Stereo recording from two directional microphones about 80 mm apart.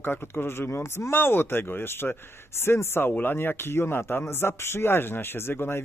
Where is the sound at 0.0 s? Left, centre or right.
Left.